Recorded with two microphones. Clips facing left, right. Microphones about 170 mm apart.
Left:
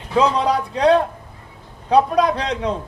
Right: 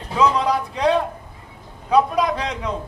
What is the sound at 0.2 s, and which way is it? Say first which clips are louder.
A man's voice: left 1 dB; 30° left (ahead or behind).